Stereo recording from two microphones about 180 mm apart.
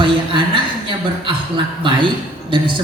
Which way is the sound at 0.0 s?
25° right (ahead or behind).